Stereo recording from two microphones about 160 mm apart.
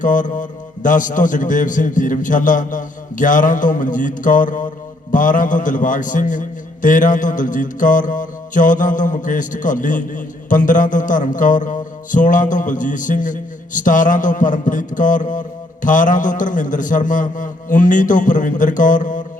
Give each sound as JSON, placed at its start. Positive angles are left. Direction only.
{"t": 0.0, "sound": "a man's voice", "side_deg": 55}